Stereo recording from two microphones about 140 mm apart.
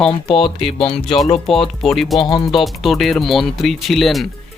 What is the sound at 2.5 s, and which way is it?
Speech, centre (ahead or behind).